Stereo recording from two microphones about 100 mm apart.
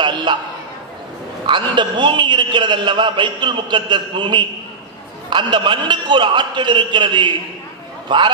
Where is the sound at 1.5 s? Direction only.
50° right (ahead or behind).